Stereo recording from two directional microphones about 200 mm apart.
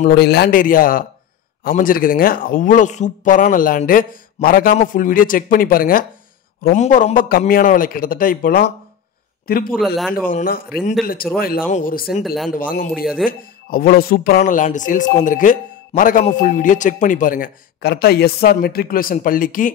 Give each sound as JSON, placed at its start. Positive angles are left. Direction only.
{"t": 0.0, "sound": "speech", "side_deg": 55}
{"t": 9.7, "sound": "a man's voice", "side_deg": 0}
{"t": 10.2, "sound": "a man's voice", "side_deg": 45}
{"t": 12.9, "sound": "a man's voice", "side_deg": -5}
{"t": 13.7, "sound": "a man's voice", "side_deg": 50}